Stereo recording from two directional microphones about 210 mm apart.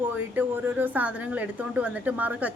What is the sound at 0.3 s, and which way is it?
A woman's voice, 10° right (ahead or behind).